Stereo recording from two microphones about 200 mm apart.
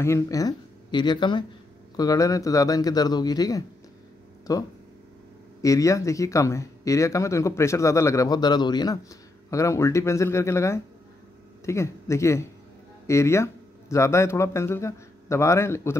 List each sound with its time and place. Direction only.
0.0 s speech: 15° left (ahead or behind)